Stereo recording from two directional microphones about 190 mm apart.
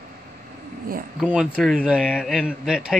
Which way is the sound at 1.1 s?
5° right (ahead or behind).